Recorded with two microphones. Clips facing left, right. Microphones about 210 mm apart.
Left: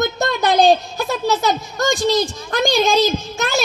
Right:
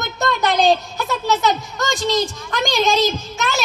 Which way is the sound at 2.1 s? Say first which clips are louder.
Left 2 dB; 30° left (ahead or behind).